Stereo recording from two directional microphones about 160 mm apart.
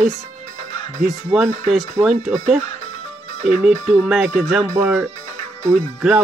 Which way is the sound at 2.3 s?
45° right (ahead or behind).